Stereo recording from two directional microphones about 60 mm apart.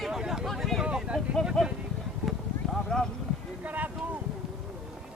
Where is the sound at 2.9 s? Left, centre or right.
Centre.